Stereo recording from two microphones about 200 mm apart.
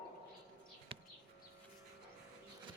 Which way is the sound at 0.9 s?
30° right (ahead or behind).